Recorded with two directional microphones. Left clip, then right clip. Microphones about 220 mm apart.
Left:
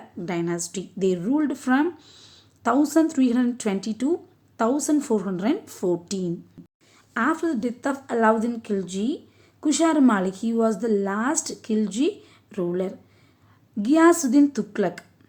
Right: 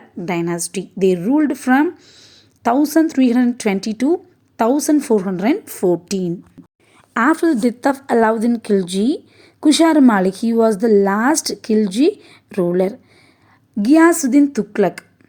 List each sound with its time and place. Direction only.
0.2 s a woman's voice: 20° right (ahead or behind)
6.6 s a sound: centre (ahead or behind)
7.1 s a woman's voice: 30° right (ahead or behind)